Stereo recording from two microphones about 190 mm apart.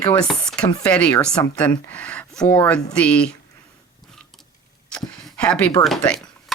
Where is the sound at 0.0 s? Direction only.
15° left (ahead or behind).